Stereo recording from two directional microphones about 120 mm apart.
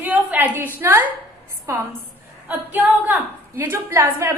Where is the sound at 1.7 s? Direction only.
25° right (ahead or behind).